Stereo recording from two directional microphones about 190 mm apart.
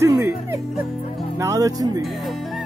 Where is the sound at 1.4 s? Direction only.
15° right (ahead or behind).